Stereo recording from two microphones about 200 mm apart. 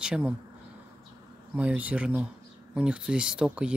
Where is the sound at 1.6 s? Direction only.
5° right (ahead or behind).